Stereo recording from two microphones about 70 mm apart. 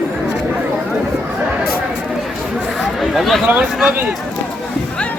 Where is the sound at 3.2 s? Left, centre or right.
Centre.